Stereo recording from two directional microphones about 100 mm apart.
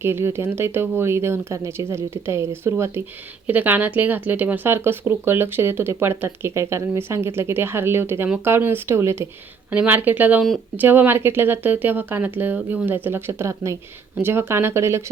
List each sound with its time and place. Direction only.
0.0 s speech: 25° right (ahead or behind)
3.4 s speech: 15° right (ahead or behind)